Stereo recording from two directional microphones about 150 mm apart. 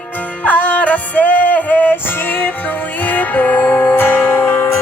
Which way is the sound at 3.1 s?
10° left (ahead or behind).